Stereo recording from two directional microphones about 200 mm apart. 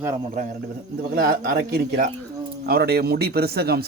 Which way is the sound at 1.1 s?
50° right (ahead or behind).